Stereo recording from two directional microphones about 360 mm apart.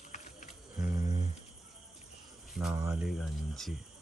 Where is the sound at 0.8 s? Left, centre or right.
Centre.